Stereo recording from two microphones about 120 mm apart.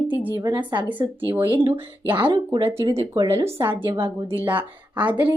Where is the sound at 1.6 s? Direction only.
20° right (ahead or behind).